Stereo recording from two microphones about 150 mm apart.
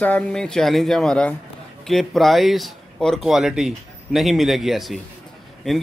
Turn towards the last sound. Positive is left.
turn(degrees=0)  # may be behind; listen again after turning